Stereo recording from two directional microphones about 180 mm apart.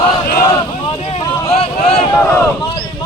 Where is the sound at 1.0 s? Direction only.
30° left (ahead or behind).